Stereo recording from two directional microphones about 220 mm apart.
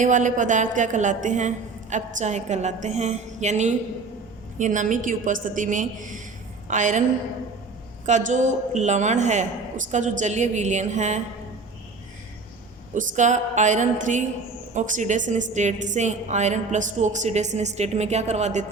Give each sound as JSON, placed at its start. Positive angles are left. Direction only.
{"t": 0.0, "sound": "a woman's voice", "side_deg": -35}
{"t": 8.0, "sound": "a woman's voice", "side_deg": -35}
{"t": 12.9, "sound": "a woman's voice", "side_deg": -35}